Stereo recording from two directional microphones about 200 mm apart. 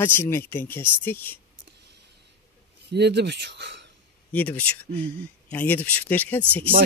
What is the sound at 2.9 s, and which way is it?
Speech, 55° right (ahead or behind).